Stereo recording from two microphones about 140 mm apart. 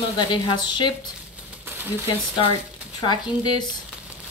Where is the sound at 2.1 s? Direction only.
40° left (ahead or behind).